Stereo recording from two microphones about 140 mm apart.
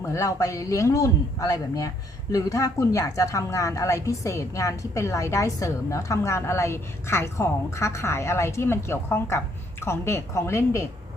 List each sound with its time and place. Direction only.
0.0 s a woman's voice: 20° left (ahead or behind)